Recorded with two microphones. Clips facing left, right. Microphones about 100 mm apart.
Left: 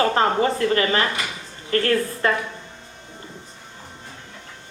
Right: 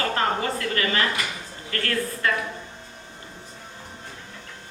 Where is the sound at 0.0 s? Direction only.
30° left (ahead or behind).